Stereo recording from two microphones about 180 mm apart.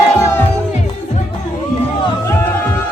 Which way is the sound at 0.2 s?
15° left (ahead or behind).